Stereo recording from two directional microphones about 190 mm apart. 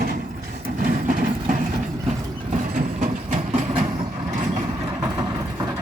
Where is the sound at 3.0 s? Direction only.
40° right (ahead or behind).